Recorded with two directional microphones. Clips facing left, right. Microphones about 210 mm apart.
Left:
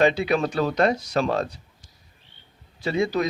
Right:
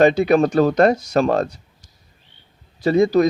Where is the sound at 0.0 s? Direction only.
45° right (ahead or behind).